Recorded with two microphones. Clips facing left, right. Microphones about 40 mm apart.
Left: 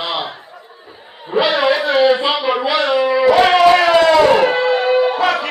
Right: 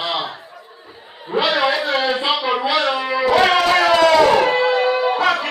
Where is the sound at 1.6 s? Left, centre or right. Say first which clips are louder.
Left 5 dB; centre.